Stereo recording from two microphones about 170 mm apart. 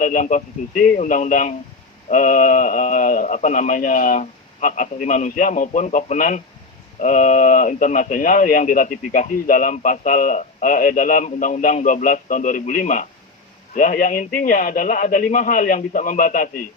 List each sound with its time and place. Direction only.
0.0 s speech: 50° left (ahead or behind)